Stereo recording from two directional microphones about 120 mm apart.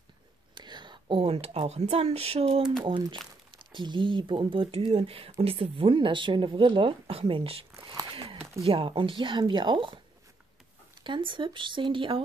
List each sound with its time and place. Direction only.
0.6 s speech: 35° right (ahead or behind); by 2.6 s 55° right (ahead or behind)
2.8 s speech: 40° right (ahead or behind)
11.1 s speech: 45° right (ahead or behind)